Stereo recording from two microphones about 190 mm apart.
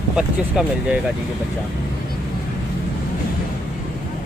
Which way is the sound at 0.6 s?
5° right (ahead or behind).